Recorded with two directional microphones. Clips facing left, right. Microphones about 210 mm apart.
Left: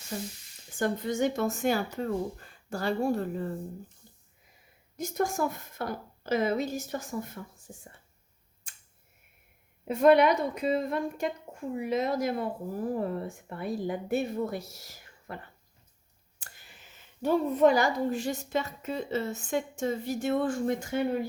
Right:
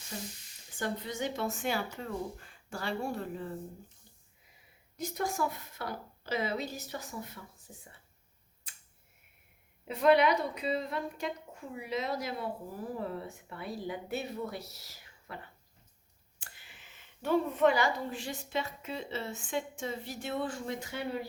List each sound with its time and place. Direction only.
0.8 s a woman's voice: 45° left (ahead or behind)
4.9 s a woman's voice: 45° left (ahead or behind)
8.7 s a sound: 45° left (ahead or behind)
9.8 s a woman's voice: 50° left (ahead or behind)
16.4 s a sound: 40° left (ahead or behind)
17.2 s a woman's voice: 40° left (ahead or behind)